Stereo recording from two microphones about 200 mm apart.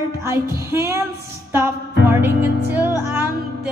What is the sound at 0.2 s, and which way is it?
Music, 15° right (ahead or behind).